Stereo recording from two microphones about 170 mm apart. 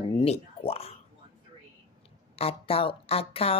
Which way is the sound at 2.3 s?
35° left (ahead or behind).